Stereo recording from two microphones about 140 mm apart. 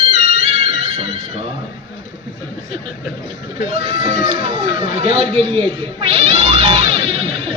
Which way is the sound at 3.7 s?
45° right (ahead or behind).